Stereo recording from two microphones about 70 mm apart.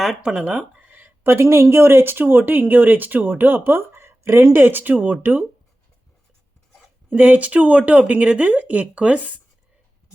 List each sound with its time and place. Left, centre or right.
0.2 s speech: centre
7.1 s speech: right